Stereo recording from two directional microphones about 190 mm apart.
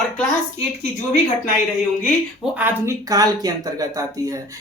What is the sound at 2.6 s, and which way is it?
Speech, 15° right (ahead or behind).